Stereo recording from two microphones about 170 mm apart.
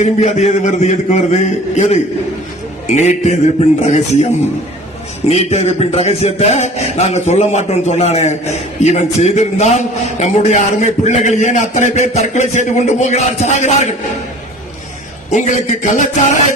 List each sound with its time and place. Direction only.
0.0 s a man's voice: 40° left (ahead or behind)
5.3 s a man's voice: 40° left (ahead or behind)
15.3 s a man's voice: 45° left (ahead or behind)